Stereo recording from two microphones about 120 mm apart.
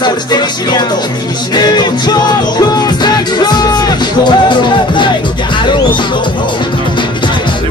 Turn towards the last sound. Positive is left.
turn(degrees=40)  # may be behind; listen again after turning